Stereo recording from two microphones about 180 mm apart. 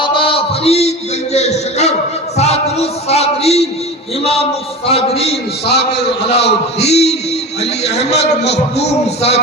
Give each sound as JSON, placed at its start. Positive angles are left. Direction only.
{"t": 0.0, "sound": "a sound", "side_deg": 30}
{"t": 2.3, "sound": "music", "side_deg": 35}
{"t": 4.2, "sound": "a man's voice", "side_deg": 30}